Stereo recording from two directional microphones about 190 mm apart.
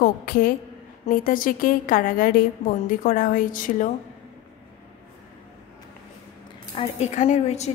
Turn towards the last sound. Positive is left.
turn(degrees=35)  # may be behind; listen again after turning